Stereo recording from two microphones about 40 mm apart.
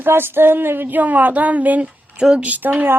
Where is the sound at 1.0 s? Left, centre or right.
Right.